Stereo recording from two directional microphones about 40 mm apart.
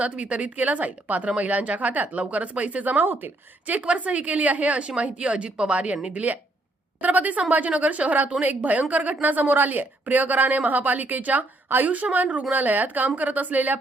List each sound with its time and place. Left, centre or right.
0.0 s a woman's voice: right
3.8 s a woman's voice: right
9.2 s a woman's voice: right
11.7 s speech: right
12.1 s a woman's voice: right